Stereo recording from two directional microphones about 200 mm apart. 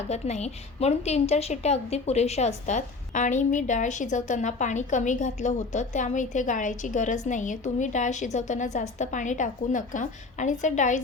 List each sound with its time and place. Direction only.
0.1 s a woman's voice: 35° left (ahead or behind)